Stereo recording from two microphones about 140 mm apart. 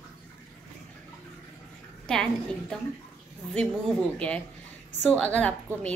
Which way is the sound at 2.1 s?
5° left (ahead or behind).